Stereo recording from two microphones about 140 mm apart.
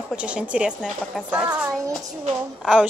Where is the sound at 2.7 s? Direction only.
5° right (ahead or behind).